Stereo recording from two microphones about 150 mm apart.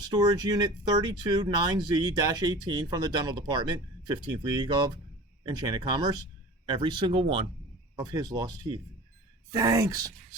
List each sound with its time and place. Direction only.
0.1 s speech: 25° right (ahead or behind)
7.9 s speech: 25° right (ahead or behind)